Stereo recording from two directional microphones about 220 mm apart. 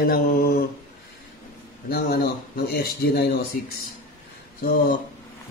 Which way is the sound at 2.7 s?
45° left (ahead or behind).